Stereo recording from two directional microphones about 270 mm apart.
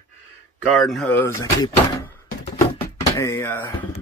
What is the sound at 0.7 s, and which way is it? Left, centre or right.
Speech, centre.